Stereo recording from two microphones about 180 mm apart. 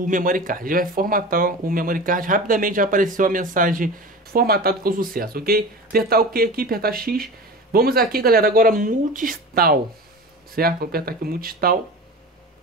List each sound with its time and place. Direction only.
0.0 s speech: 50° right (ahead or behind)